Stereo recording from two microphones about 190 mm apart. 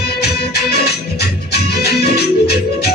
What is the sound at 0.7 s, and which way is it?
Music, 60° left (ahead or behind).